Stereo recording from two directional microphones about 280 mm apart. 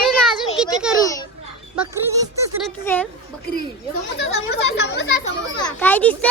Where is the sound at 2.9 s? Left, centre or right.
Centre.